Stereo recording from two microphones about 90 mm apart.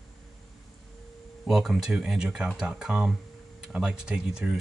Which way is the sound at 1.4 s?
5° right (ahead or behind).